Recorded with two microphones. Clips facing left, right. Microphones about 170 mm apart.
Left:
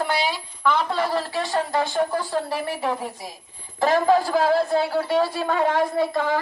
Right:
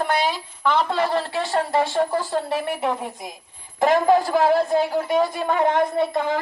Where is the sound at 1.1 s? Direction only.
Centre (ahead or behind).